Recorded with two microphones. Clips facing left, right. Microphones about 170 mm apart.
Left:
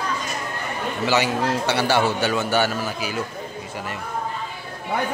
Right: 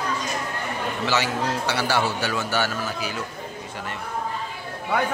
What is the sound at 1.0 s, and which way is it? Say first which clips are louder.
A man's voice: left 4 dB; 15° left (ahead or behind).